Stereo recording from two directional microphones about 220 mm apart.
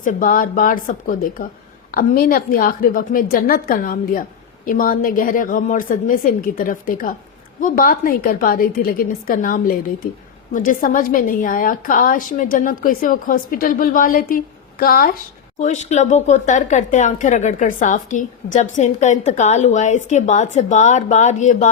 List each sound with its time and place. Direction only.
0.0 s a woman's voice: 40° left (ahead or behind)